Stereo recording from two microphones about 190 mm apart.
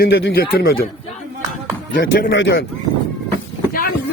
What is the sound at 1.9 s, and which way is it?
Speech, 75° left (ahead or behind).